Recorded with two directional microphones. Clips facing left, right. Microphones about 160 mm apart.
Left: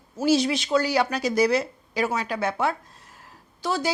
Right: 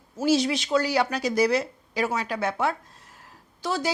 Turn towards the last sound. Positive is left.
turn(degrees=10)  # may be behind; listen again after turning